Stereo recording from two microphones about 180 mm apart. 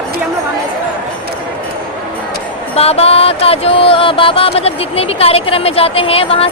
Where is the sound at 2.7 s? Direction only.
35° left (ahead or behind).